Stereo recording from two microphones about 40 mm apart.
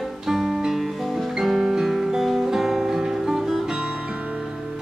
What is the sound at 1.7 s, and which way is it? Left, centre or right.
Music, centre.